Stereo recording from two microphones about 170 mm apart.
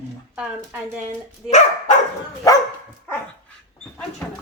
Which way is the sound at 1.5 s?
45° left (ahead or behind).